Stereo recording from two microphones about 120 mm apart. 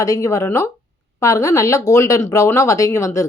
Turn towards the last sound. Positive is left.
turn(degrees=25)  # may be behind; listen again after turning